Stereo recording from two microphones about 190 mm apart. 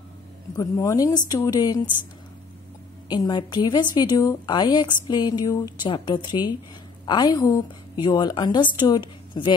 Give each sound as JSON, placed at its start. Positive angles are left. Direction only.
{"t": 0.6, "sound": "a woman's voice", "side_deg": 15}
{"t": 3.1, "sound": "a woman's voice", "side_deg": 20}